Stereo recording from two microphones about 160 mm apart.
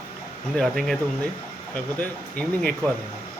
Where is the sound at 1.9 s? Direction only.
5° left (ahead or behind).